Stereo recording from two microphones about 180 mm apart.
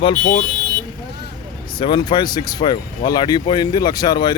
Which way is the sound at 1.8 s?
25° left (ahead or behind).